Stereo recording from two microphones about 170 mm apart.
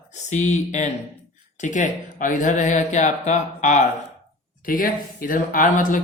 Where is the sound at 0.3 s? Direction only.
45° left (ahead or behind).